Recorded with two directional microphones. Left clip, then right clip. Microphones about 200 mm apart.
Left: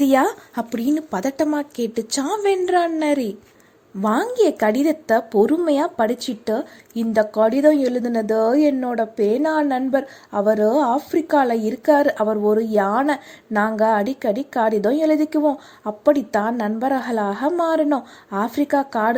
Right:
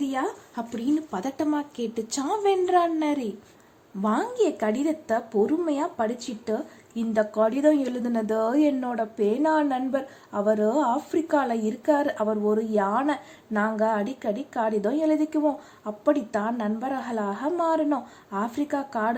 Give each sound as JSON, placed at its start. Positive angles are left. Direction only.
{"t": 0.0, "sound": "speech", "side_deg": 45}